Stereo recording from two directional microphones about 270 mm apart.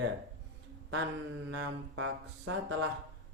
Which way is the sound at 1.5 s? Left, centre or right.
Right.